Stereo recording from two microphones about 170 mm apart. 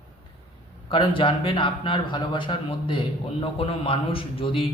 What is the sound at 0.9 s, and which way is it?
A man's voice, 30° left (ahead or behind).